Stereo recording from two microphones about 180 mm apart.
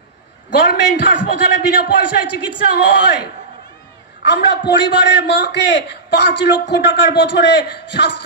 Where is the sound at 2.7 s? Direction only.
70° left (ahead or behind).